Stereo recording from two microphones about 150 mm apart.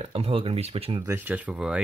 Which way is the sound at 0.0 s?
40° right (ahead or behind).